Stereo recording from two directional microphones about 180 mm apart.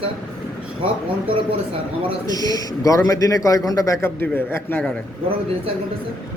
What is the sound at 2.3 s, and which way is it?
A man's voice, 20° left (ahead or behind).